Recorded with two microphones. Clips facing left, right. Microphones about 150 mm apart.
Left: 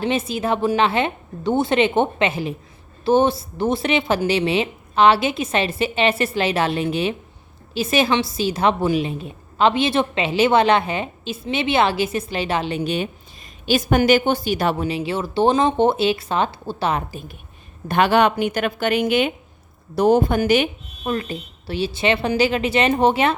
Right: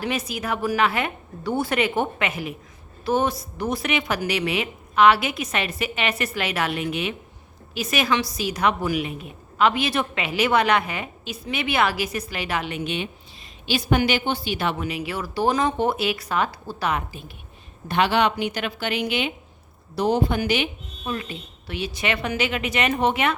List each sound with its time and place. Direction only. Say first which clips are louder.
0.0 s a woman's voice: left 6 dB; 25° left (ahead or behind)
17.8 s a woman's voice: left 4 dB; 50° left (ahead or behind)
21.7 s speech: left 6 dB; 30° left (ahead or behind)